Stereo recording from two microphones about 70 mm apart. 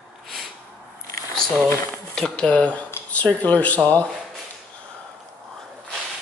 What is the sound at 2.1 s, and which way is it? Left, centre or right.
Speech, centre.